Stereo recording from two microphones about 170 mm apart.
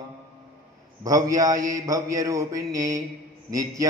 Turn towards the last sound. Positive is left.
turn(degrees=-20)  # may be behind; listen again after turning